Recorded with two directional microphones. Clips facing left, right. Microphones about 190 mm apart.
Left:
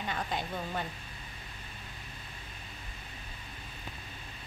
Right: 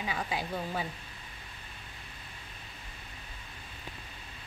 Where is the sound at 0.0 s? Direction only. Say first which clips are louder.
Right 1 dB; 5° right (ahead or behind).